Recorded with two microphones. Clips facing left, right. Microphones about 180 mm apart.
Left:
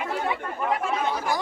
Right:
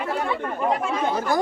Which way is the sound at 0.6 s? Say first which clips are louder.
Right 3 dB; 35° right (ahead or behind).